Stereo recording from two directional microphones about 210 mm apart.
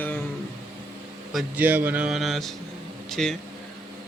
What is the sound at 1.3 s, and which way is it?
Speech, 10° right (ahead or behind).